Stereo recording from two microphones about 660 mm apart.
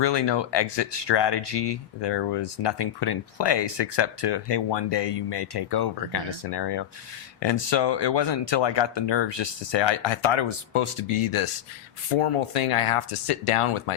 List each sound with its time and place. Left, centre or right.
0.0 s speech: left